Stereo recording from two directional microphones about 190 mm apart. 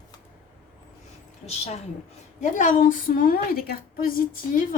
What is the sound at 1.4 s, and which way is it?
A woman's voice, 35° left (ahead or behind).